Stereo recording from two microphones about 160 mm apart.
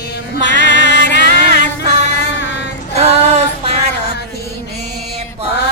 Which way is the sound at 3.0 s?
40° right (ahead or behind).